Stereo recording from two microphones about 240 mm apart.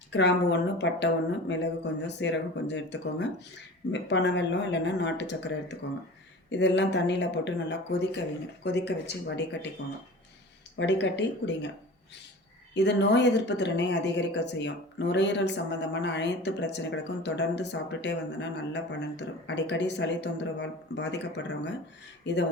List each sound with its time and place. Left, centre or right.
0.1 s speech: left
6.5 s speech: left
10.8 s speech: left
12.7 s speech: left